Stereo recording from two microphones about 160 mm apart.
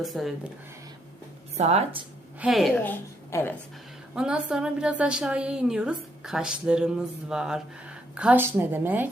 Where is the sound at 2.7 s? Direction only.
10° left (ahead or behind).